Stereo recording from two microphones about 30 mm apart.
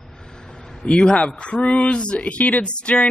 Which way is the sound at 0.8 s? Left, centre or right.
Left.